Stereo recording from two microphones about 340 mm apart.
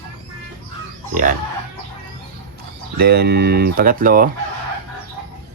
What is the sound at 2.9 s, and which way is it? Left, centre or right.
Speech, right.